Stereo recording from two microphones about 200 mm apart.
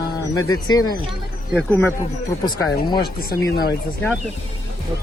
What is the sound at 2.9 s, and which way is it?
Speech, 50° left (ahead or behind).